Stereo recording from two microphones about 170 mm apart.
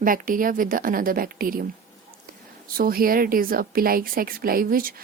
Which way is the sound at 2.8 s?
60° right (ahead or behind).